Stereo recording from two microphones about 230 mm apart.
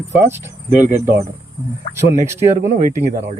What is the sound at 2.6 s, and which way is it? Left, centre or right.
Speech, right.